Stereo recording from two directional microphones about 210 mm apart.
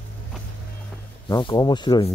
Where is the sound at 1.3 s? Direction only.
20° left (ahead or behind).